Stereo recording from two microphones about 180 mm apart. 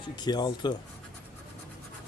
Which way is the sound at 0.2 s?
25° left (ahead or behind).